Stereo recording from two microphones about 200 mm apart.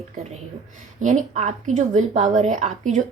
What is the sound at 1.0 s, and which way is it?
Speech, 40° right (ahead or behind).